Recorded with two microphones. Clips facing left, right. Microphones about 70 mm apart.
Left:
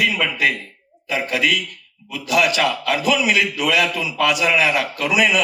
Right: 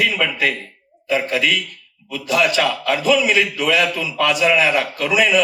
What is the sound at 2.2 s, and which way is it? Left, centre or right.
A man's voice, right.